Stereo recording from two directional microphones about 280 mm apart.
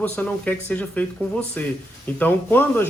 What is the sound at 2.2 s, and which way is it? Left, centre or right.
Speech, centre.